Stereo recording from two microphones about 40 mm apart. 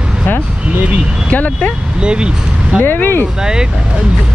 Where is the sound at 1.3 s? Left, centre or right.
Left.